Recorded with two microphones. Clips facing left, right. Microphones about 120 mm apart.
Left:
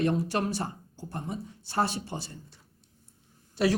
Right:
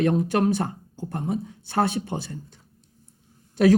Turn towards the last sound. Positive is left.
turn(degrees=-50)  # may be behind; listen again after turning